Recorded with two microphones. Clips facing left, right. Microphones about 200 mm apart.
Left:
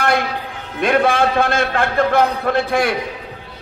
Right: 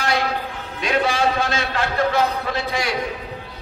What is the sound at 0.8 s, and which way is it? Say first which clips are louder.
A man's voice: left 5 dB; 55° left (ahead or behind).